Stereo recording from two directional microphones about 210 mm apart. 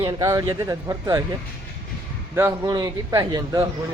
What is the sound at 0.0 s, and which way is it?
A man's voice, 15° right (ahead or behind).